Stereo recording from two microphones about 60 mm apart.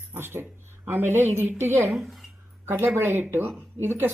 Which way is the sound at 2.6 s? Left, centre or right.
Right.